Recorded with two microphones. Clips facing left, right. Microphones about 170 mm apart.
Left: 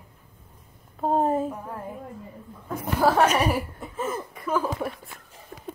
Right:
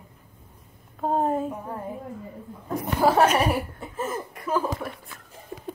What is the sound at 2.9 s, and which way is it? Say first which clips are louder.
A woman's voice: right 1 dB; 10° right (ahead or behind).